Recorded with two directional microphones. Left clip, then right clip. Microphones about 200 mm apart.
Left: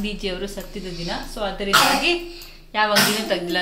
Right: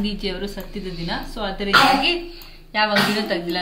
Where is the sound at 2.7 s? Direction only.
10° left (ahead or behind).